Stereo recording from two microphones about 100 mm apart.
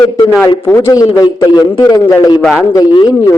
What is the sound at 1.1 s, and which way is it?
Speech, 45° left (ahead or behind).